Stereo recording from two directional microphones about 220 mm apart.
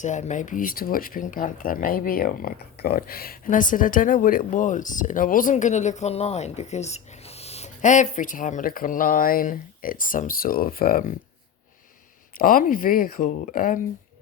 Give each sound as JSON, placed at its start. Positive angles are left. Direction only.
{"t": 0.0, "sound": "speech", "side_deg": 35}
{"t": 12.4, "sound": "speech", "side_deg": 40}